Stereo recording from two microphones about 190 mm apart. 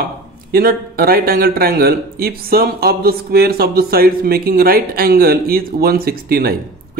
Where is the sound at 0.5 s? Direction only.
50° right (ahead or behind).